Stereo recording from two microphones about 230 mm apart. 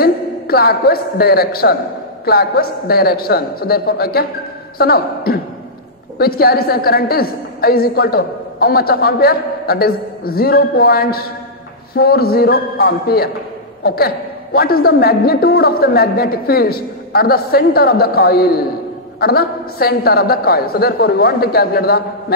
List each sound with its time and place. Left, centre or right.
0.0 s a man's voice: left